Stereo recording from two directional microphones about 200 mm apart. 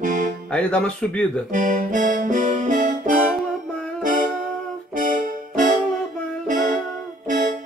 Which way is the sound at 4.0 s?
40° right (ahead or behind).